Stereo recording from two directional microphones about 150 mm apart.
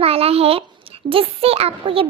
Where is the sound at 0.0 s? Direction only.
40° right (ahead or behind).